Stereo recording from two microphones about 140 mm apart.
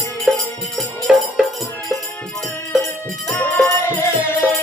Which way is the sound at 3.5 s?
15° left (ahead or behind).